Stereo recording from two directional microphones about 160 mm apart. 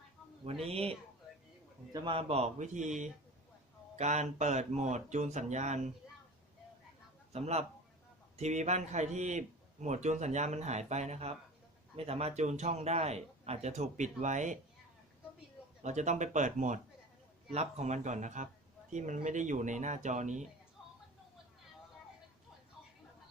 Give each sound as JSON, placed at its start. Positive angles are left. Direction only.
{"t": 0.4, "sound": "a man's voice", "side_deg": -40}
{"t": 3.9, "sound": "a man's voice", "side_deg": -45}
{"t": 7.3, "sound": "a man's voice", "side_deg": -40}
{"t": 15.8, "sound": "a man's voice", "side_deg": -45}